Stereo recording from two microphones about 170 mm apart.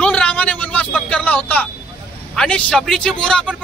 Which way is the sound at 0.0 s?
5° left (ahead or behind).